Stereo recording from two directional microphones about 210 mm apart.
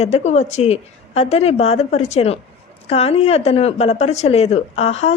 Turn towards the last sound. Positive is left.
turn(degrees=30)  # may be behind; listen again after turning